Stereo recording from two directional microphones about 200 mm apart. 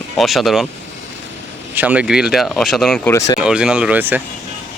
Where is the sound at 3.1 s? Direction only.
15° left (ahead or behind).